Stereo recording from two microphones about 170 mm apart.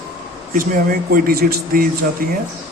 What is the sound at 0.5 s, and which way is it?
Speech, 55° right (ahead or behind).